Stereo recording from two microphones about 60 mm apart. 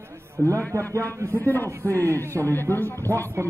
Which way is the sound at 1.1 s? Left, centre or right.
Right.